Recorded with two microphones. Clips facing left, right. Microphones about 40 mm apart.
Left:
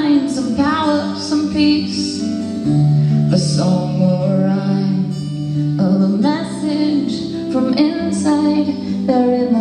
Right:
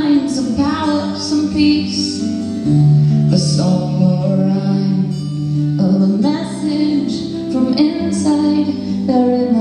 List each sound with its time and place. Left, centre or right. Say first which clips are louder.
0.0 s a sound: right 1 dB; centre
3.1 s music: right 1 dB; centre
7.5 s music: right 1 dB; centre